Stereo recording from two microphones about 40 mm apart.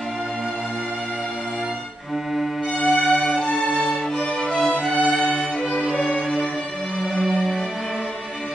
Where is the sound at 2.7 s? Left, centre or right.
Left.